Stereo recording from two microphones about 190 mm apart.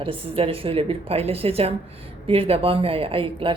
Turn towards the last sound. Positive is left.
turn(degrees=-30)  # may be behind; listen again after turning